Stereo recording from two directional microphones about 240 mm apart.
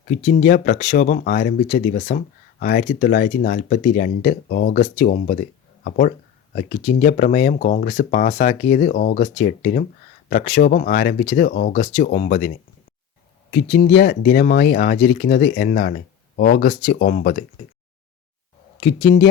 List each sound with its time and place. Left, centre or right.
0.3 s speech: left
13.5 s speech: left
18.8 s speech: left